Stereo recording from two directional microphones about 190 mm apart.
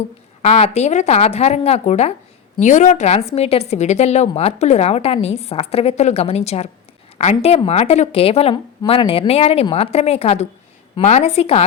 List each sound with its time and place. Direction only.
0.4 s a woman's voice: 35° left (ahead or behind)